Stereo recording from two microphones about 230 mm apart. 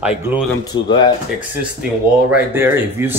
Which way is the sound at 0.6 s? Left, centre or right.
Centre.